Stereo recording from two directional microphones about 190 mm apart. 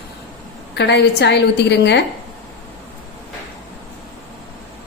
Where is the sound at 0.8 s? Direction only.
65° left (ahead or behind).